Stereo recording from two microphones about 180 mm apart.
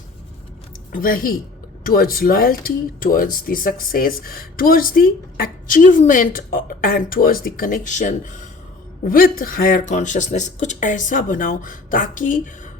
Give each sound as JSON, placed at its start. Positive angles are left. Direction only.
{"t": 0.9, "sound": "speech", "side_deg": 50}